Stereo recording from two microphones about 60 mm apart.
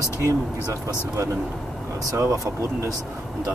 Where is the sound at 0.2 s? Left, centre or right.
Right.